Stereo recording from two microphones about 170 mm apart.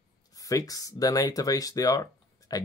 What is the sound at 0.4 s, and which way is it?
Speech, 20° left (ahead or behind).